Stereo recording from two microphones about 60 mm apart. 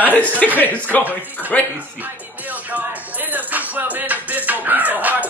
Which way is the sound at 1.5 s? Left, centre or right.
Left.